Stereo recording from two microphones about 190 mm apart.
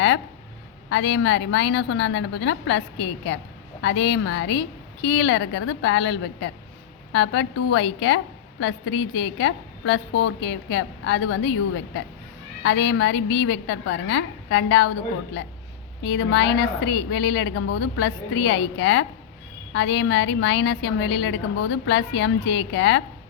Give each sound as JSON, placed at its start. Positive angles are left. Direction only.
{"t": 0.9, "sound": "a woman's voice", "side_deg": 80}
{"t": 12.6, "sound": "a woman's voice", "side_deg": 75}
{"t": 16.0, "sound": "a woman's voice", "side_deg": 75}